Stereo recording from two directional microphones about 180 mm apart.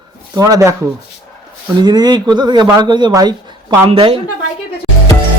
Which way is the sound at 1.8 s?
25° right (ahead or behind).